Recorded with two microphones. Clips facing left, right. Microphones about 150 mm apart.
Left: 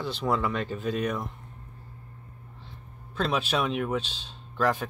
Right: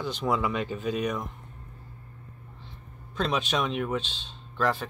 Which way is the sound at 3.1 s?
5° left (ahead or behind).